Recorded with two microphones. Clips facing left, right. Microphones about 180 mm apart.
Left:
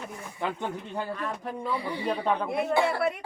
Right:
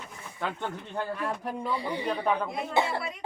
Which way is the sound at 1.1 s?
10° right (ahead or behind).